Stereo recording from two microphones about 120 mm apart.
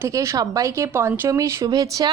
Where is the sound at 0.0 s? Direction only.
25° right (ahead or behind).